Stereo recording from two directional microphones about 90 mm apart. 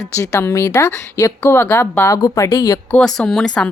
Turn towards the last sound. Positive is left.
turn(degrees=10)  # may be behind; listen again after turning